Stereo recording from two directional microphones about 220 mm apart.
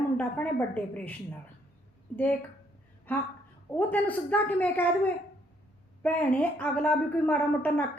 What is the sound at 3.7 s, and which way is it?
A woman's voice, 10° left (ahead or behind).